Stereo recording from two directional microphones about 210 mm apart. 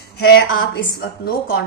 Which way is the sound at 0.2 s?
50° left (ahead or behind).